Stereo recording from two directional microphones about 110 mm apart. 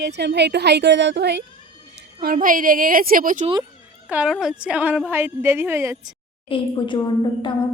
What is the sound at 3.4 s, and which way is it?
Speech, 65° right (ahead or behind).